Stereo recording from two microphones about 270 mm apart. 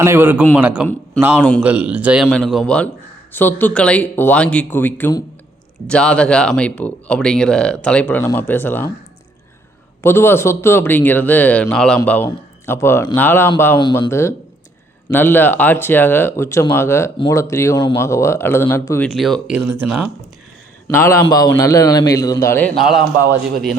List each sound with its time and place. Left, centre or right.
0.0 s a man's voice: centre
10.0 s speech: centre
20.9 s speech: centre